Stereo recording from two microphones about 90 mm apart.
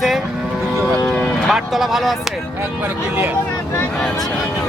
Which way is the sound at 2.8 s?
20° right (ahead or behind).